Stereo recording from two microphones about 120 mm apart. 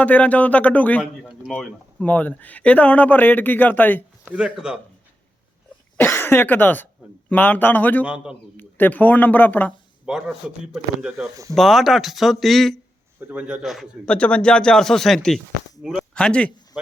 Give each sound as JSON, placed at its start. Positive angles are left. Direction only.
{"t": 0.0, "sound": "speech", "side_deg": 10}
{"t": 1.2, "sound": "a sound", "side_deg": 0}
{"t": 2.0, "sound": "speech", "side_deg": 15}
{"t": 4.3, "sound": "a man's voice", "side_deg": -5}
{"t": 6.0, "sound": "speech", "side_deg": 20}
{"t": 8.0, "sound": "a man's voice", "side_deg": -10}
{"t": 8.5, "sound": "speech", "side_deg": 15}
{"t": 10.1, "sound": "speech", "side_deg": -5}
{"t": 13.1, "sound": "a man's voice", "side_deg": -15}
{"t": 14.0, "sound": "speech", "side_deg": 10}
{"t": 16.1, "sound": "speech", "side_deg": 10}